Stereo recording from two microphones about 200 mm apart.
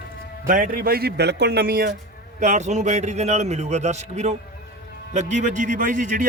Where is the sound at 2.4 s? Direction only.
35° right (ahead or behind).